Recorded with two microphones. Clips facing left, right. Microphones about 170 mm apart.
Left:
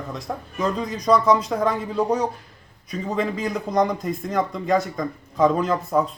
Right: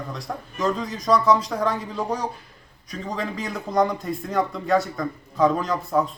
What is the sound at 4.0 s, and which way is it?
Speech, 20° left (ahead or behind).